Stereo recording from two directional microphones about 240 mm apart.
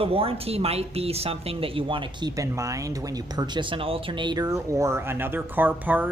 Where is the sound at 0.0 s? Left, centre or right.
Right.